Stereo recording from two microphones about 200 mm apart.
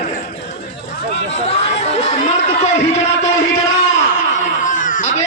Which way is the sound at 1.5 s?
35° left (ahead or behind).